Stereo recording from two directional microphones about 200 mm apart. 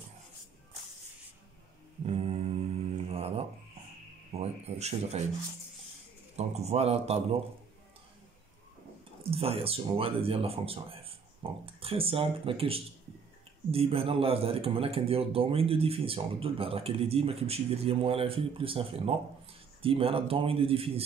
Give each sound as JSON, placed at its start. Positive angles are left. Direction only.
{"t": 2.0, "sound": "mantra", "side_deg": -30}
{"t": 4.4, "sound": "speech", "side_deg": -30}
{"t": 6.3, "sound": "speech", "side_deg": -35}
{"t": 9.3, "sound": "speech", "side_deg": -30}